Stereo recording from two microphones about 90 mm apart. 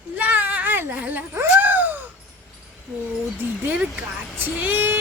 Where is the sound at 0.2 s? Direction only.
20° right (ahead or behind).